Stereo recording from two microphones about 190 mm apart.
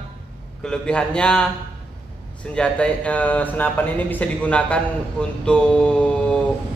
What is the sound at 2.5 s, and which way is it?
Speech, 5° left (ahead or behind).